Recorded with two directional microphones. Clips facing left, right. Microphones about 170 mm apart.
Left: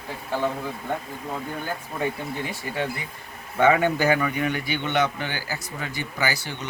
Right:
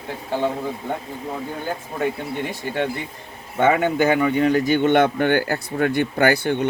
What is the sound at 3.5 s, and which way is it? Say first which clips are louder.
A man's voice: right 2 dB; 20° right (ahead or behind).